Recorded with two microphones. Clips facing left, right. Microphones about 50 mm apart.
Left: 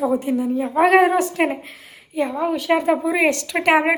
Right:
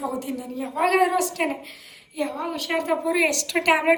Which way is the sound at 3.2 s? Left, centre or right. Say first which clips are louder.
Left 4 dB; left.